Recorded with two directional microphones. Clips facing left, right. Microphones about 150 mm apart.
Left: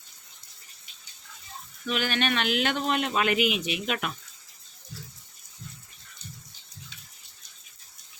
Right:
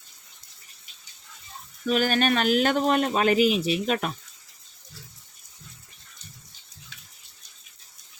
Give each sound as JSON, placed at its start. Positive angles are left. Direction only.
{"t": 1.9, "sound": "speech", "side_deg": -40}